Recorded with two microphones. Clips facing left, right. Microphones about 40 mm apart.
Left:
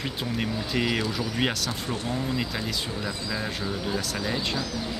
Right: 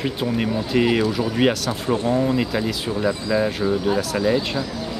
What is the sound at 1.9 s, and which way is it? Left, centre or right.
Speech, right.